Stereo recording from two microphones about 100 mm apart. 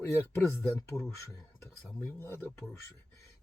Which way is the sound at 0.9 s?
30° left (ahead or behind).